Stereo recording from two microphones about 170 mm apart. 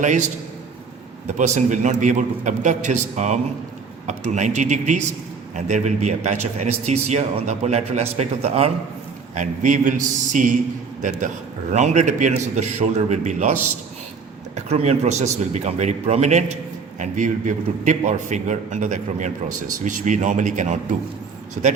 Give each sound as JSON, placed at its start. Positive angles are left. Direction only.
{"t": 0.0, "sound": "a man's voice", "side_deg": -45}
{"t": 1.4, "sound": "a man's voice", "side_deg": -45}
{"t": 9.3, "sound": "a man's voice", "side_deg": -45}